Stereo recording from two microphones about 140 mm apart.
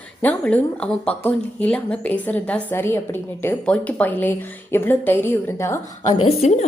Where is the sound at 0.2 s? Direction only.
10° left (ahead or behind).